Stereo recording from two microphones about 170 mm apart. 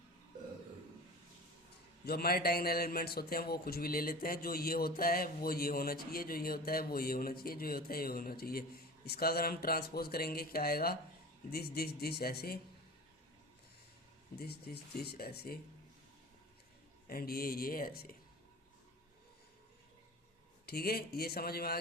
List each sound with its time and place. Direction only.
2.0 s a man's voice: 65° left (ahead or behind)
14.3 s speech: 65° left (ahead or behind)
17.1 s a man's voice: 60° left (ahead or behind)
20.7 s a man's voice: 65° left (ahead or behind)